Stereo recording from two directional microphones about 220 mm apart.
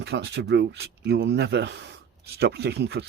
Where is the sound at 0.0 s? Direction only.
50° right (ahead or behind).